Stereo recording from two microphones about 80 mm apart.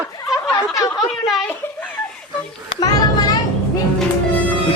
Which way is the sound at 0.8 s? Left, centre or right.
Left.